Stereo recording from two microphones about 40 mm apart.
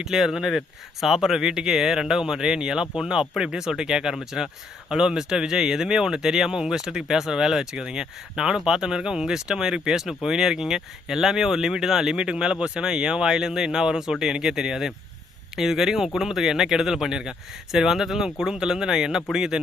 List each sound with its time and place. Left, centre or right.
0.0 s speech: centre